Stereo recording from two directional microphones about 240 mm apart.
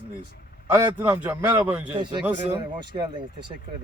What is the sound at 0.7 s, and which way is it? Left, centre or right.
A man's voice, centre.